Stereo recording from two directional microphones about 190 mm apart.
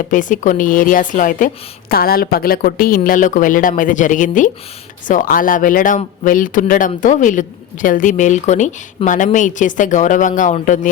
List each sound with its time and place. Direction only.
0.0 s speech: 45° left (ahead or behind)